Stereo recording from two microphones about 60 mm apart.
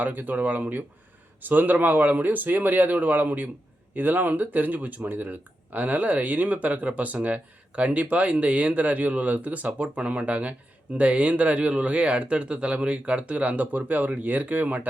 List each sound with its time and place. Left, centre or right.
0.0 s speech: right